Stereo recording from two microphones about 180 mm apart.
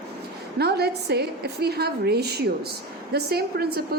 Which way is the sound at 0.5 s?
65° right (ahead or behind).